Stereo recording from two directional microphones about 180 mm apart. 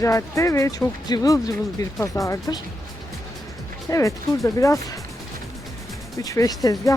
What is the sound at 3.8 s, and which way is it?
Speech, 15° left (ahead or behind).